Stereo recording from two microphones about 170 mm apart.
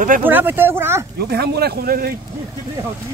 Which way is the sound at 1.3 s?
70° right (ahead or behind).